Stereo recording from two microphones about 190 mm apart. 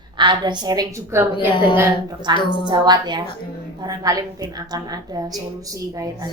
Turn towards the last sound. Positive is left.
turn(degrees=-20)  # may be behind; listen again after turning